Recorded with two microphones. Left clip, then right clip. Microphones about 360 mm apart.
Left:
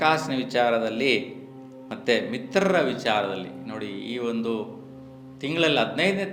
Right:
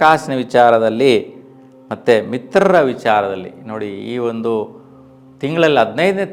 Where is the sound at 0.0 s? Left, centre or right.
Right.